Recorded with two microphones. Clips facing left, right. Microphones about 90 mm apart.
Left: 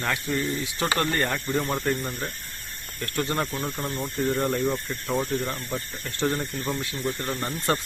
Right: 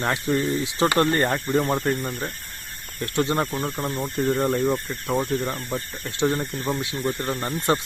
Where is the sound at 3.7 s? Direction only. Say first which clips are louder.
Right 3 dB; 5° right (ahead or behind); by 7.5 s 25° right (ahead or behind).